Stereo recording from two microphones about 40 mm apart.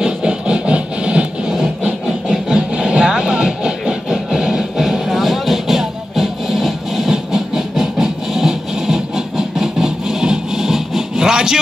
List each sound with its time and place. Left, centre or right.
0.0 s music: right
2.0 s engine: centre
2.7 s music: right